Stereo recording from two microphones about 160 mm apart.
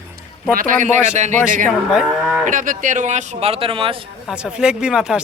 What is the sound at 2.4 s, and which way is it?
Speech, 55° right (ahead or behind).